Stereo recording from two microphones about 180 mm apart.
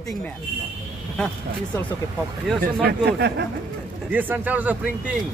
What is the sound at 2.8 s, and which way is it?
Speech, 65° right (ahead or behind).